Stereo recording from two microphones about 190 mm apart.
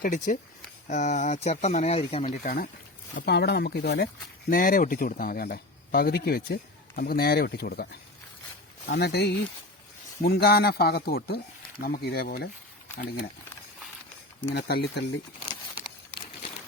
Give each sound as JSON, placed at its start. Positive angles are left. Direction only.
{"t": 0.0, "sound": "speech", "side_deg": 45}
{"t": 3.2, "sound": "speech", "side_deg": 60}
{"t": 8.9, "sound": "speech", "side_deg": 60}
{"t": 14.5, "sound": "speech", "side_deg": 55}